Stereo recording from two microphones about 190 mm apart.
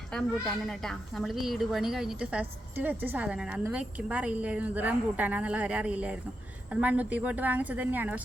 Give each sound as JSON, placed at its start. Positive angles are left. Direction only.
{"t": 0.1, "sound": "a woman's voice", "side_deg": 5}